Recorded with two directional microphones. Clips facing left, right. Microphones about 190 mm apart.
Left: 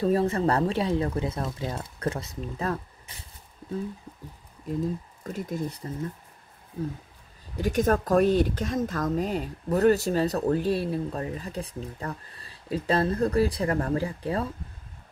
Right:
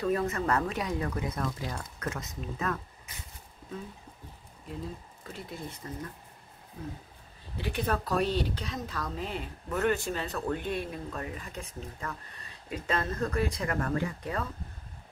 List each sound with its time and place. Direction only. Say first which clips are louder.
0.0 s speech: left 6 dB; 30° left (ahead or behind)
5.2 s speech: left 9 dB; 45° left (ahead or behind)
7.5 s speech: left 8 dB; 45° left (ahead or behind)